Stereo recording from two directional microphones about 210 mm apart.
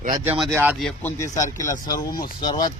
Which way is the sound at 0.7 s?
5° left (ahead or behind).